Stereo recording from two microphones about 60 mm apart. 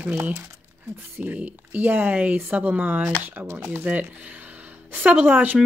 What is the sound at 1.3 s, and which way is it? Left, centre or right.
Speech, right.